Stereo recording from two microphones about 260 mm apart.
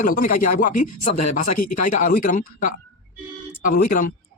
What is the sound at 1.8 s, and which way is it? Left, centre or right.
Speech, left.